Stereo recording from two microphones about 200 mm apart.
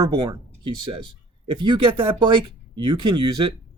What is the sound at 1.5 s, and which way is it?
Speech, 20° right (ahead or behind).